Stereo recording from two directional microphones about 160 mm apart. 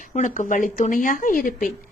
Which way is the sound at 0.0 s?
55° left (ahead or behind).